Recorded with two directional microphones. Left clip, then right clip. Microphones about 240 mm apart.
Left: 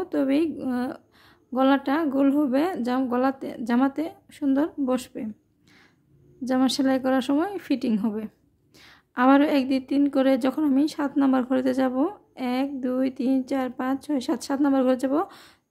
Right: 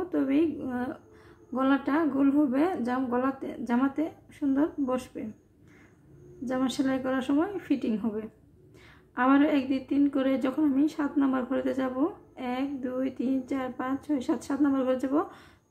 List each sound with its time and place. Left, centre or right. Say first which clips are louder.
0.1 s a woman's voice: left 3 dB; left
6.4 s a woman's voice: left 6 dB; left